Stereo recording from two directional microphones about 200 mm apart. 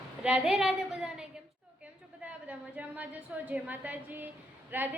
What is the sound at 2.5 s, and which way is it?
A woman's voice, 5° right (ahead or behind).